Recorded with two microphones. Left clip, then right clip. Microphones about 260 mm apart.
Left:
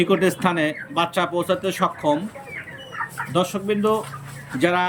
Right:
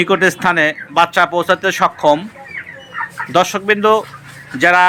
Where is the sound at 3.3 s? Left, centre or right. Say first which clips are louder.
Right 10 dB; centre.